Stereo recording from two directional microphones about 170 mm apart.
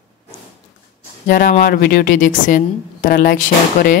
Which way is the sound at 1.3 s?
55° left (ahead or behind).